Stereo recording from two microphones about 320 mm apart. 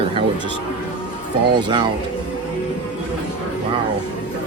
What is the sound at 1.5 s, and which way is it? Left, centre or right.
Speech, centre.